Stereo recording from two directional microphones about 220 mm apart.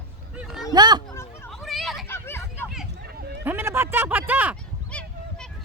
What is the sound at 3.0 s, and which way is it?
Run, 45° right (ahead or behind).